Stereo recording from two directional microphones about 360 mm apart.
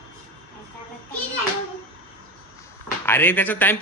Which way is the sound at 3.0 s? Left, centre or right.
Centre.